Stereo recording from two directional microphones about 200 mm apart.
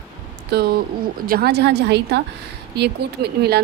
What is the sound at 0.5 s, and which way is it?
A woman's voice, 50° right (ahead or behind).